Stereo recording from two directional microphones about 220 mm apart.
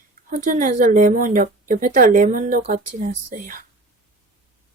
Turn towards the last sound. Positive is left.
turn(degrees=-40)  # may be behind; listen again after turning